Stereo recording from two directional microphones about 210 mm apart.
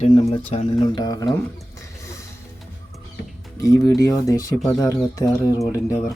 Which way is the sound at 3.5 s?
15° left (ahead or behind).